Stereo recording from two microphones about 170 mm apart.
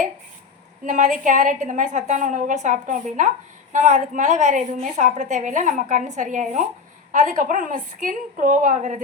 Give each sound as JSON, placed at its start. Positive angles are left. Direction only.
{"t": 0.9, "sound": "a woman's voice", "side_deg": -50}